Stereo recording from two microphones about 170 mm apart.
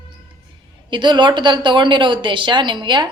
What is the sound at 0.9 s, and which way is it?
Speech, 25° right (ahead or behind).